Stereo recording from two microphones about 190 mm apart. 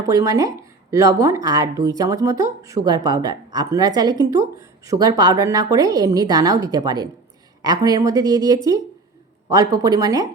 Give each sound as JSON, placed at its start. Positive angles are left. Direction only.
{"t": 0.0, "sound": "speech", "side_deg": -20}